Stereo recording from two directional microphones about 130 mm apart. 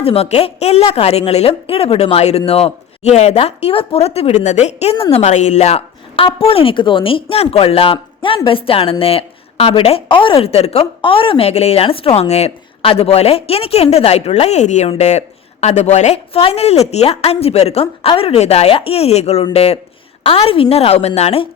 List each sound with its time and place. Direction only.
0.0 s a woman's voice: 50° left (ahead or behind)